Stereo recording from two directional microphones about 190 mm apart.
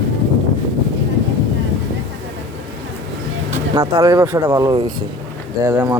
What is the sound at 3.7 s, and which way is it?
Speech, 15° right (ahead or behind).